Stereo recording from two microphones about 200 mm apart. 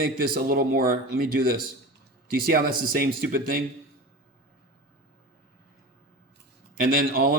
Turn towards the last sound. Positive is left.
turn(degrees=-45)  # may be behind; listen again after turning